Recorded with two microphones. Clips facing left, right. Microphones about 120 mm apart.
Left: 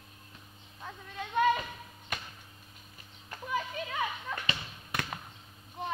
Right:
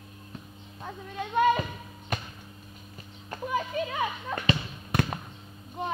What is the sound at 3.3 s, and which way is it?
Basketball bounce, 40° right (ahead or behind).